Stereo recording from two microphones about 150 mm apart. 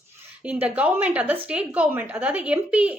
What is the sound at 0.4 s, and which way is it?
A woman's voice, 10° right (ahead or behind).